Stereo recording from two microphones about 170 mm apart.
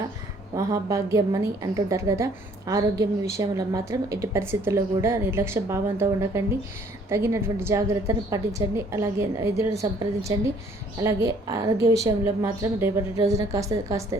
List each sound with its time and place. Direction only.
0.5 s a woman's voice: 20° right (ahead or behind)
11.0 s a woman's voice: 20° right (ahead or behind)